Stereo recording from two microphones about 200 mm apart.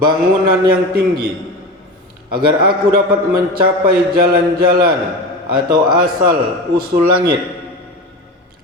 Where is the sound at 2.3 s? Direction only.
50° right (ahead or behind).